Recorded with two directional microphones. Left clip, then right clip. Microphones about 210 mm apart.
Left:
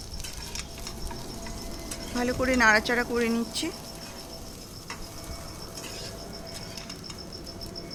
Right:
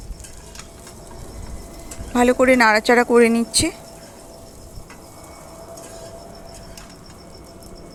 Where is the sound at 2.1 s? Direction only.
30° right (ahead or behind).